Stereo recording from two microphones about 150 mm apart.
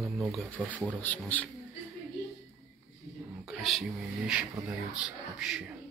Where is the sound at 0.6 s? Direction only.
Centre (ahead or behind).